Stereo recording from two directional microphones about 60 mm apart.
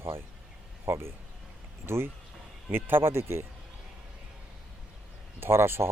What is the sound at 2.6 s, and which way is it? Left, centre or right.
Speech, right.